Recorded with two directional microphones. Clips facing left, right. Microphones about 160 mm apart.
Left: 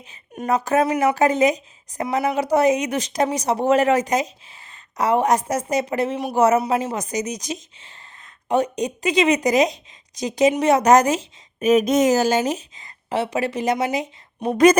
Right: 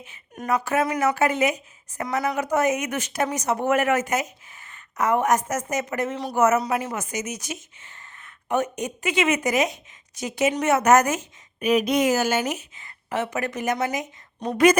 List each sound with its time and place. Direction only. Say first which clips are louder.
0.0 s a woman's voice: left 4 dB; 35° left (ahead or behind)
11.6 s a woman's voice: left 4 dB; 45° left (ahead or behind)